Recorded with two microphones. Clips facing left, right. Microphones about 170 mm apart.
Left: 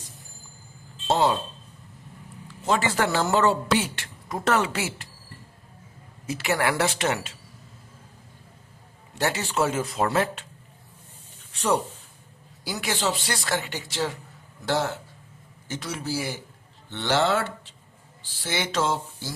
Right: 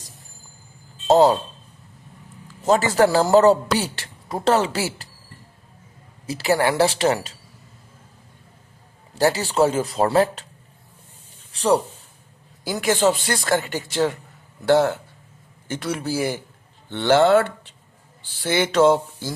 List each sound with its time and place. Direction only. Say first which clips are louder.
1.0 s a man's voice: right 7 dB; 40° right (ahead or behind)
2.6 s a man's voice: right 7 dB; 40° right (ahead or behind)
6.2 s a man's voice: right 5 dB; 35° right (ahead or behind)
9.1 s a man's voice: right 7 dB; 35° right (ahead or behind)
11.5 s speech: right 5 dB; 35° right (ahead or behind)
12.6 s speech: right 8 dB; 50° right (ahead or behind)